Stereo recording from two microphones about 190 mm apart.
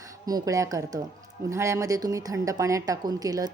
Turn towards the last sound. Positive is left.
turn(degrees=-20)  # may be behind; listen again after turning